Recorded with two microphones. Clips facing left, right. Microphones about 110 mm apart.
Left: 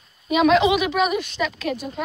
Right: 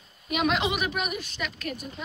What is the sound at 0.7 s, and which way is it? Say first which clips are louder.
Speech: left 9 dB; 90° left.